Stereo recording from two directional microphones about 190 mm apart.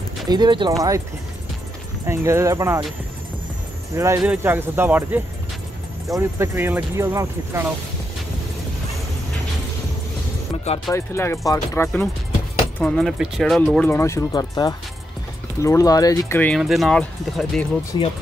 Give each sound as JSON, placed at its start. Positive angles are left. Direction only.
{"t": 0.3, "sound": "speech", "side_deg": -25}
{"t": 2.0, "sound": "speech", "side_deg": -15}
{"t": 3.9, "sound": "speech", "side_deg": -15}
{"t": 10.9, "sound": "speech", "side_deg": 15}
{"t": 13.8, "sound": "speech", "side_deg": 15}
{"t": 17.9, "sound": "speech", "side_deg": 25}